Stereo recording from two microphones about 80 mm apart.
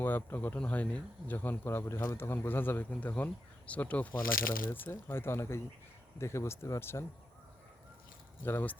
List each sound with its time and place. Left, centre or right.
0.0 s speech: left
8.4 s speech: left